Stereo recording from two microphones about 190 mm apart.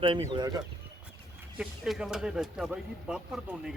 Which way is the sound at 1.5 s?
5° right (ahead or behind).